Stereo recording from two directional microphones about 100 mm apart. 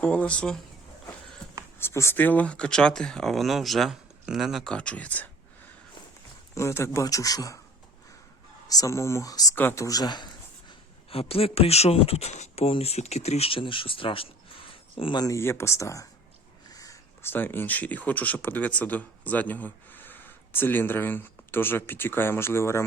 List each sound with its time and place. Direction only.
0.0 s speech: 15° left (ahead or behind)
1.8 s speech: 25° left (ahead or behind); by 4.7 s 5° right (ahead or behind)
4.7 s speech: 10° left (ahead or behind)
6.5 s speech: 30° left (ahead or behind)
8.6 s speech: 35° left (ahead or behind)
9.6 s speech: 20° left (ahead or behind)
9.8 s speech: 40° left (ahead or behind)
11.1 s speech: 75° left (ahead or behind)
15.1 s speech: 40° left (ahead or behind)
15.4 s speech: 25° left (ahead or behind)
16.7 s a sound: 35° left (ahead or behind)
17.2 s speech: 20° left (ahead or behind)